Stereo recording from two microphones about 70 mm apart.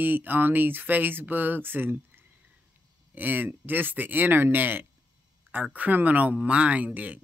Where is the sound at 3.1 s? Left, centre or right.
Right.